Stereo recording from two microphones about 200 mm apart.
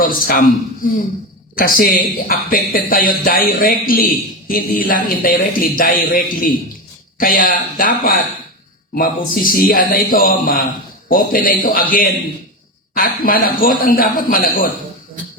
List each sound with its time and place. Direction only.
0.0 s speech: 45° left (ahead or behind)
1.5 s speech: 45° left (ahead or behind)